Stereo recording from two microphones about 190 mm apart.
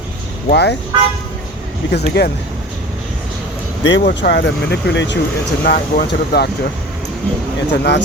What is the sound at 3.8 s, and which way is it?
Speech, 70° left (ahead or behind).